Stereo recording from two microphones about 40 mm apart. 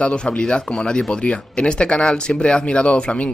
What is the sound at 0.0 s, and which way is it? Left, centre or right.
Speech, left.